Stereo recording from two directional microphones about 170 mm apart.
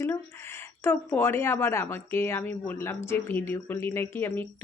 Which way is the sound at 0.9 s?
10° left (ahead or behind).